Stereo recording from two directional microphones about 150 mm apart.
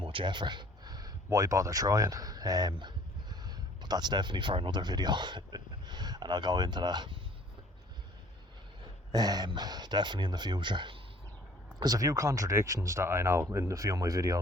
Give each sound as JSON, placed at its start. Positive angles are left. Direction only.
{"t": 0.0, "sound": "speech", "side_deg": -35}
{"t": 9.1, "sound": "speech", "side_deg": -25}